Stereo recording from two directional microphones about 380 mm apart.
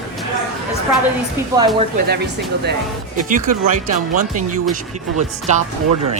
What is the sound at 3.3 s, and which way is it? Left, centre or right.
Speech, right.